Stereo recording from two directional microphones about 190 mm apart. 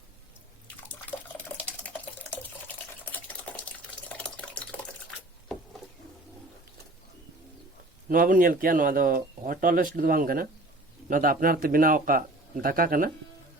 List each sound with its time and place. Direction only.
2.6 s water: 10° left (ahead or behind)
8.1 s speech: 45° right (ahead or behind)